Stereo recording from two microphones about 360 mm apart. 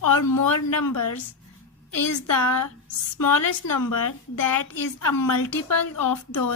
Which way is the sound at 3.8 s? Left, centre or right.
Left.